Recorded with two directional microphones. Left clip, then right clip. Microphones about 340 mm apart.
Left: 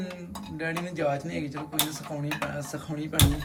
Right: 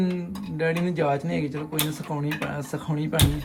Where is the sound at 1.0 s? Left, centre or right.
Centre.